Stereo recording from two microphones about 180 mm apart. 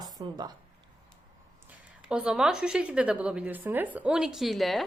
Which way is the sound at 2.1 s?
5° right (ahead or behind).